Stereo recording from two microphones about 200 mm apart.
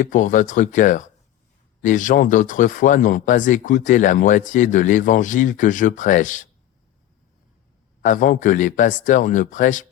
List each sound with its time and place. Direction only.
0.0 s speech: 40° left (ahead or behind)
8.0 s speech: 40° left (ahead or behind)